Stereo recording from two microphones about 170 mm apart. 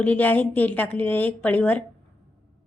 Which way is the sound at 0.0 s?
10° left (ahead or behind).